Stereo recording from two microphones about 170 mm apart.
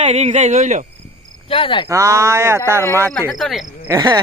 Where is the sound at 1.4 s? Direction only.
30° left (ahead or behind).